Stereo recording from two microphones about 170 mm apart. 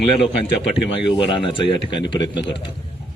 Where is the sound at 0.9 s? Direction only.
30° left (ahead or behind).